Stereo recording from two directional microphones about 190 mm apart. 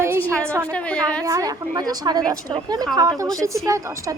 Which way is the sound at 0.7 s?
5° left (ahead or behind).